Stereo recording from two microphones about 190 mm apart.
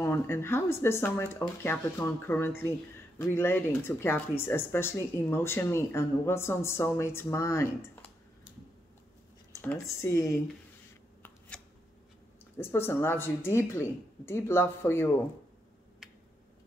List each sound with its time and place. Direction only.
0.0 s speech: 15° left (ahead or behind)
9.5 s speech: 15° left (ahead or behind)
11.2 s shuffling cards: 10° left (ahead or behind)
12.5 s speech: 10° left (ahead or behind)